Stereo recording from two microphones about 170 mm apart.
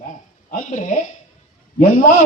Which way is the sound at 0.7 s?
45° left (ahead or behind).